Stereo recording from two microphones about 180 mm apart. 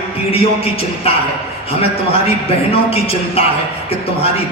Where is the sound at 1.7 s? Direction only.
35° left (ahead or behind).